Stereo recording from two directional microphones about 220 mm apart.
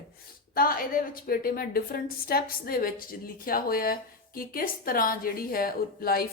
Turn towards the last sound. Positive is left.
turn(degrees=45)  # may be behind; listen again after turning